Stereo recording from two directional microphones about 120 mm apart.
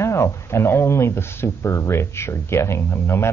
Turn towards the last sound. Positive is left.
turn(degrees=20)  # may be behind; listen again after turning